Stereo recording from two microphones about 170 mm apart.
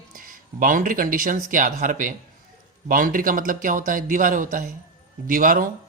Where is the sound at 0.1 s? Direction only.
55° right (ahead or behind).